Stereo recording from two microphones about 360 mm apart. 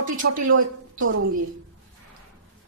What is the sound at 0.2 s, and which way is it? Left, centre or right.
Speech, right.